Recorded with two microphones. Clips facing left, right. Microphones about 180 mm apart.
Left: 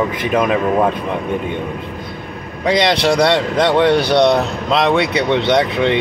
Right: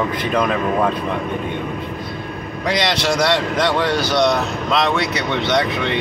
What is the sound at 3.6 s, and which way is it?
Speech, 25° left (ahead or behind).